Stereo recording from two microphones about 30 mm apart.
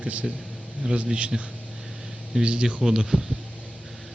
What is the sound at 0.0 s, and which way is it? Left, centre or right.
Speech, right.